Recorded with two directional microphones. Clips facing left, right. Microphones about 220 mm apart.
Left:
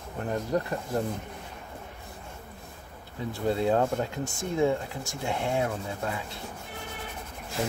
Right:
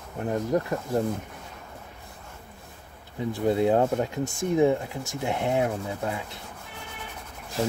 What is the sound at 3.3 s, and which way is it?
Speech, 15° right (ahead or behind).